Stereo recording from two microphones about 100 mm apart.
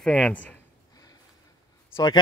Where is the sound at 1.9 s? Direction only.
45° left (ahead or behind).